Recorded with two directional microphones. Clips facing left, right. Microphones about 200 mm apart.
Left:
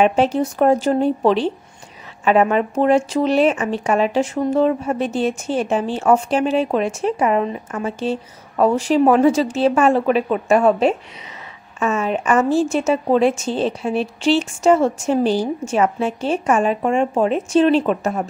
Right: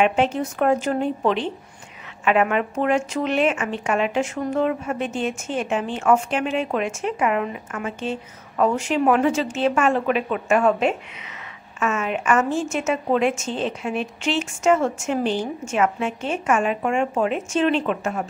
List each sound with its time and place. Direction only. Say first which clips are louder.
0.0 s speech: left 4 dB; 35° left (ahead or behind)